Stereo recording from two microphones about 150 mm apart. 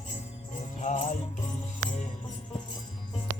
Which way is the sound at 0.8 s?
60° left (ahead or behind).